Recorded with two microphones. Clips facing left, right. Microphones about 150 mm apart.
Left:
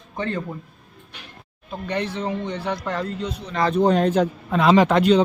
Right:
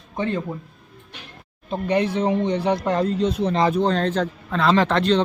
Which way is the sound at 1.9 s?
15° right (ahead or behind).